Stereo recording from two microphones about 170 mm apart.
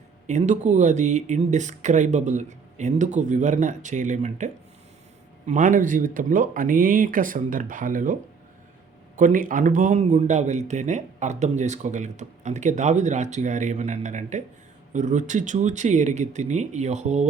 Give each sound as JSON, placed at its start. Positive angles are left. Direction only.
{"t": 0.3, "sound": "speech", "side_deg": -45}
{"t": 9.1, "sound": "speech", "side_deg": -50}